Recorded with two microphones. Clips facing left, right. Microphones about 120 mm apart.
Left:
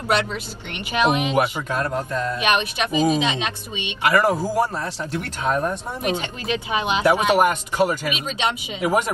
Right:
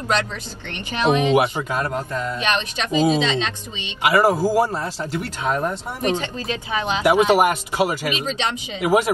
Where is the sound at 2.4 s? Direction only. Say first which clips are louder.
Left 3 dB; 15° left (ahead or behind).